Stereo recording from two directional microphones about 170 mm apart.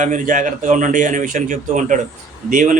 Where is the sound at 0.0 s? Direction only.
50° right (ahead or behind).